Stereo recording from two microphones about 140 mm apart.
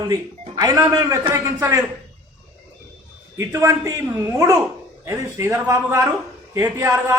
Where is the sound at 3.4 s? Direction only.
20° right (ahead or behind).